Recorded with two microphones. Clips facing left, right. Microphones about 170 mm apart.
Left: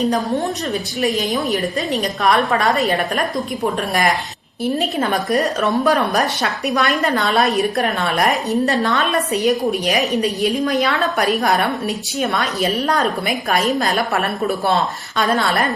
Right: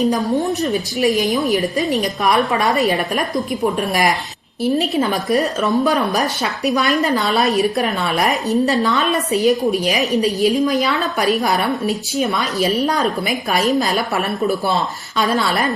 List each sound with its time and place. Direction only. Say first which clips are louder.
0.0 s a woman's voice: right 2 dB; centre (ahead or behind)
2.4 s a woman's voice: even; 20° right (ahead or behind)
5.0 s a woman's voice: even; centre (ahead or behind)
15.2 s a woman's voice: even; centre (ahead or behind)